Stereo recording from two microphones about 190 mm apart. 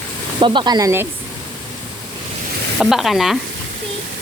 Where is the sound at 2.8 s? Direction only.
Centre (ahead or behind).